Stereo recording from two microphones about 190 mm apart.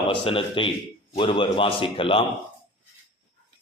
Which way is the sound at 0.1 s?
30° left (ahead or behind).